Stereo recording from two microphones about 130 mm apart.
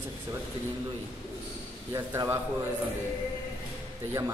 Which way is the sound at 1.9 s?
30° right (ahead or behind).